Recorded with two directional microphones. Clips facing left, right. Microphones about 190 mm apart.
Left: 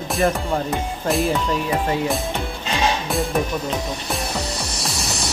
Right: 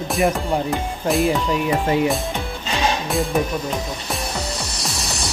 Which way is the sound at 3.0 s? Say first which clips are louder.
Right 1 dB; centre (ahead or behind).